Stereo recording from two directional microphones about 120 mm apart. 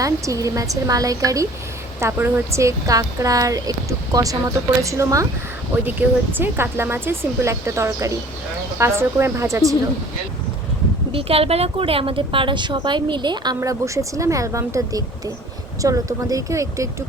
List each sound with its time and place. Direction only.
0.0 s speech: 30° right (ahead or behind)
6.3 s speech: 20° right (ahead or behind)
11.1 s a woman's voice: 50° right (ahead or behind)
13.6 s speech: 25° right (ahead or behind)